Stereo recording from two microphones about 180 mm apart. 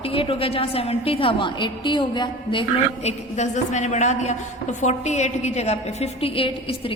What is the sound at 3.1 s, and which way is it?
A woman's voice, 40° left (ahead or behind).